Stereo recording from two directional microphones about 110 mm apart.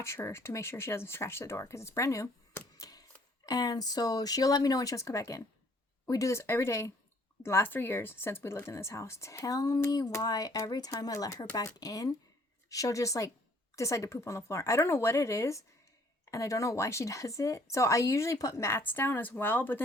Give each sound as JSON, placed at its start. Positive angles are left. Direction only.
{"t": 0.0, "sound": "a woman's voice", "side_deg": 25}